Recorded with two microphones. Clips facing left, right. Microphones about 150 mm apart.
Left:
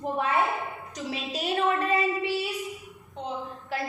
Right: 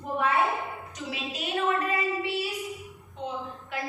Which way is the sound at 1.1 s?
35° left (ahead or behind).